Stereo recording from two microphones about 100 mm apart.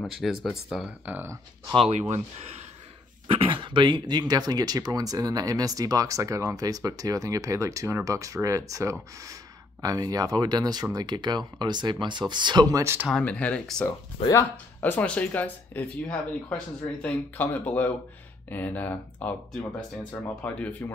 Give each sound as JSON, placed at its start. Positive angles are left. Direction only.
{"t": 0.1, "sound": "speech", "side_deg": 0}
{"t": 1.0, "sound": "speech", "side_deg": -15}
{"t": 1.8, "sound": "speech", "side_deg": -90}
{"t": 3.3, "sound": "speech", "side_deg": -60}
{"t": 12.8, "sound": "speech", "side_deg": -20}
{"t": 13.2, "sound": "speech", "side_deg": 10}
{"t": 14.2, "sound": "speech", "side_deg": 85}
{"t": 14.8, "sound": "speech", "side_deg": 15}